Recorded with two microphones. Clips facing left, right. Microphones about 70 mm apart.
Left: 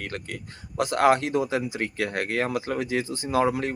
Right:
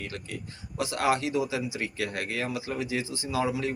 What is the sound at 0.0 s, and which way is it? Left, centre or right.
Speech, left.